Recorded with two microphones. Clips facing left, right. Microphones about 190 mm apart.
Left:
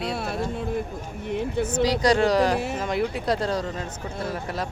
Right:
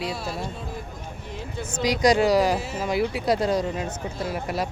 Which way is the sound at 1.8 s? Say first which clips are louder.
Right 1 dB; 15° right (ahead or behind).